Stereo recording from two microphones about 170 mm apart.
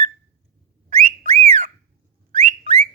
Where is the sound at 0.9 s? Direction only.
40° right (ahead or behind).